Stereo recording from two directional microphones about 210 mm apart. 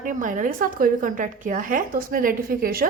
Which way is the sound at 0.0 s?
40° right (ahead or behind).